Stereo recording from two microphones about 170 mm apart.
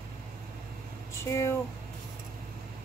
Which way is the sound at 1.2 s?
15° left (ahead or behind).